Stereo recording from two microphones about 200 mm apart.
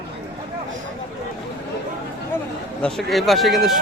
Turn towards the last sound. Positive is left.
turn(degrees=0)  # may be behind; listen again after turning